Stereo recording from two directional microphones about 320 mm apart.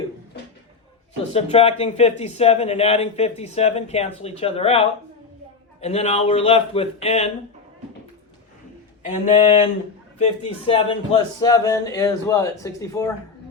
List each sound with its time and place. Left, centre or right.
1.3 s speech: centre
9.0 s speech: left